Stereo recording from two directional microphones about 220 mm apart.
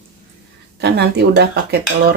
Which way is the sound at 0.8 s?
50° right (ahead or behind).